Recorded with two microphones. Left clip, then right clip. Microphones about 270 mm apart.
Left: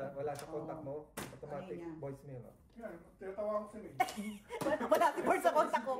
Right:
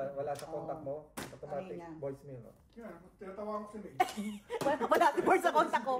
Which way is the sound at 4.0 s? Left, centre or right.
Right.